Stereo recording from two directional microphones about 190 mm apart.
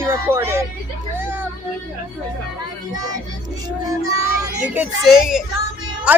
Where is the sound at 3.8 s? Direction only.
15° right (ahead or behind).